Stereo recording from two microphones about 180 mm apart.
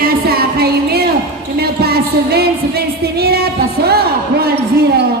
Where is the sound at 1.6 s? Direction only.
60° right (ahead or behind).